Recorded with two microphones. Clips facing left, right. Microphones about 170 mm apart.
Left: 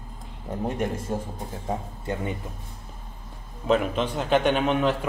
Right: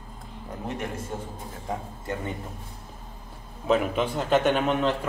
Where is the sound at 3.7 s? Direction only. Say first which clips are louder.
Even; centre (ahead or behind).